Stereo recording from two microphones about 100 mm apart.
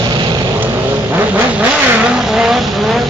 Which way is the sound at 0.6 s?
20° right (ahead or behind).